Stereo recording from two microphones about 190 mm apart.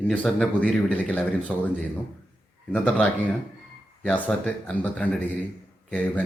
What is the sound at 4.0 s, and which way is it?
Speech, 10° left (ahead or behind).